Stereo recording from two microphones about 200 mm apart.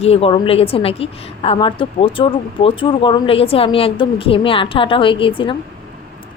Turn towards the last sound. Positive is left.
turn(degrees=25)  # may be behind; listen again after turning